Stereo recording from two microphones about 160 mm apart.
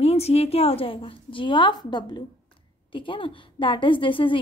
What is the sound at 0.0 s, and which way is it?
A woman's voice, 40° left (ahead or behind).